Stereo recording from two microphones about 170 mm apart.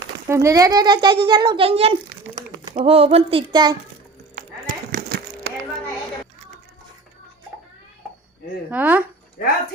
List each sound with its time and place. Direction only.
0.3 s a child's voice: 20° right (ahead or behind)
4.9 s a sound: 65° right (ahead or behind)
8.7 s speech: 10° right (ahead or behind)